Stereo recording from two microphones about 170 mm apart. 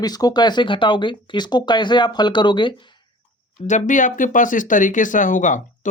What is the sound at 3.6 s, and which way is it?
Speech, 45° left (ahead or behind).